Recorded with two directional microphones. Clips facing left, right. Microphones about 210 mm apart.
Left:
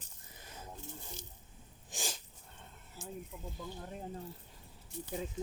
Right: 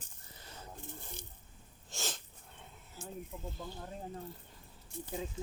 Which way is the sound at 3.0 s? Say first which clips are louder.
Even; 60° right (ahead or behind).